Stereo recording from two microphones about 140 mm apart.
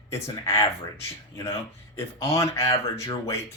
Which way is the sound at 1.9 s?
20° left (ahead or behind).